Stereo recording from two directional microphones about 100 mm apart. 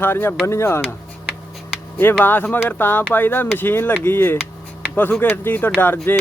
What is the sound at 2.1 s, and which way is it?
Speech, 15° left (ahead or behind).